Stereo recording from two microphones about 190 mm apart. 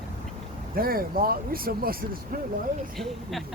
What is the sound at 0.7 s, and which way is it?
Speech, 50° right (ahead or behind).